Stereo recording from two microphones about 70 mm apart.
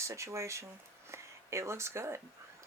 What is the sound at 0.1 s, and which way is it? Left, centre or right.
Speech, right.